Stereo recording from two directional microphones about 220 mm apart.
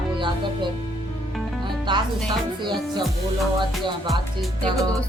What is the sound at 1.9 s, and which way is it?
Speech, 20° right (ahead or behind).